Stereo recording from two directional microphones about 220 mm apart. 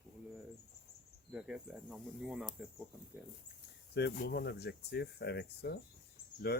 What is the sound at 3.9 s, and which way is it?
Speech, 50° left (ahead or behind).